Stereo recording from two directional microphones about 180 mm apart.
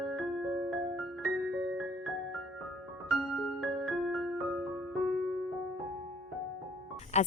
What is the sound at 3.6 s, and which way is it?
Music, centre (ahead or behind).